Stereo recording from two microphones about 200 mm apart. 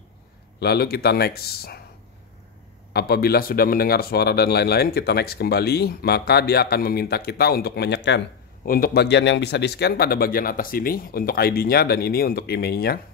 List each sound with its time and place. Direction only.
0.6 s a man's voice: 50° left (ahead or behind)
2.9 s a man's voice: 50° left (ahead or behind)
8.6 s a man's voice: 45° left (ahead or behind)